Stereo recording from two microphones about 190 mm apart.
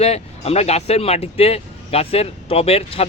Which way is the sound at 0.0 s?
35° left (ahead or behind).